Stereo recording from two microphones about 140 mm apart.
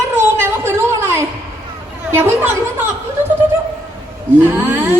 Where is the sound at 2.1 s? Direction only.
15° right (ahead or behind).